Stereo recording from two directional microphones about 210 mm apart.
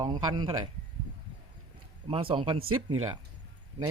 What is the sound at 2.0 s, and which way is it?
Speech, 25° right (ahead or behind).